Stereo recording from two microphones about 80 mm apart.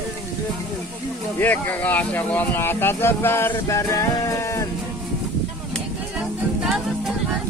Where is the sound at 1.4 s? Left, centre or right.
Left.